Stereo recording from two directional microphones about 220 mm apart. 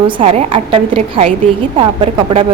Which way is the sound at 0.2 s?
25° right (ahead or behind).